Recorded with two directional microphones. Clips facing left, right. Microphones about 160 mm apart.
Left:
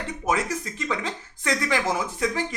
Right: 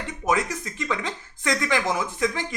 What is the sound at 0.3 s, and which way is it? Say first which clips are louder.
Speech: right 1 dB; 35° left (ahead or behind).